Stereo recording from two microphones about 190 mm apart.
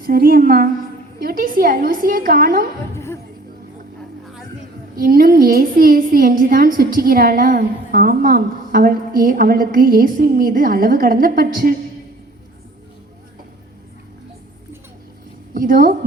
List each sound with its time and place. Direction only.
0.0 s a woman's voice: 50° right (ahead or behind)
2.9 s speech: 15° left (ahead or behind)
4.9 s a woman's voice: 45° right (ahead or behind)
15.5 s a woman's voice: 45° right (ahead or behind)